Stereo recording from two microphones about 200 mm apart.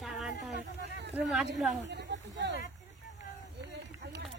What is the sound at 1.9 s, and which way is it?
Speech, 55° right (ahead or behind).